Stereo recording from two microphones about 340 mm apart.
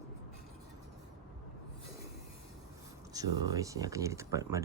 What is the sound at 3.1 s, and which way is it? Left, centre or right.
Speech, centre.